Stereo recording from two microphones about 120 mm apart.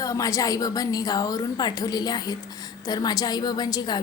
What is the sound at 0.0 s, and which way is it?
A woman's voice, 30° left (ahead or behind).